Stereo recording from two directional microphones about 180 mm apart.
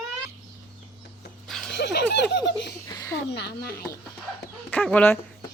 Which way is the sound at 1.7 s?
70° left (ahead or behind).